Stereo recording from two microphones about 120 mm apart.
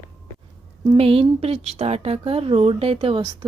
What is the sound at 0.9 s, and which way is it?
A woman's voice, 55° right (ahead or behind).